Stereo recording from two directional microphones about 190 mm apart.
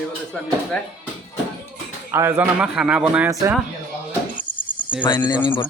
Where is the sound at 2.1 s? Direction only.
15° right (ahead or behind).